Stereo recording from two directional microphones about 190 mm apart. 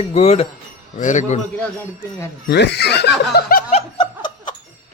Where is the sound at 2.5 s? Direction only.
60° left (ahead or behind).